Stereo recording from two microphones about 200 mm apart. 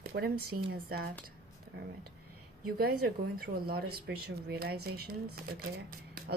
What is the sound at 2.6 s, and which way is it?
Speech, 50° right (ahead or behind).